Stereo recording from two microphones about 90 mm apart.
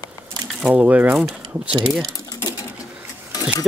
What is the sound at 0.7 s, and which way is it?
Speech, 20° right (ahead or behind).